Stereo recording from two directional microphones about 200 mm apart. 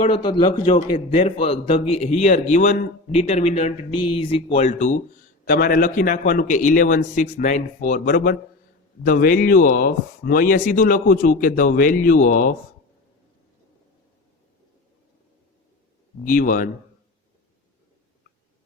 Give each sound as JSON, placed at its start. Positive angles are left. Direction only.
{"t": 0.0, "sound": "a man's voice", "side_deg": 25}
{"t": 16.2, "sound": "speech", "side_deg": 45}